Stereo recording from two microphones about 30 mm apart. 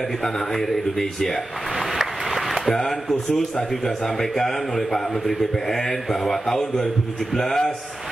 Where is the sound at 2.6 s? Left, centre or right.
Centre.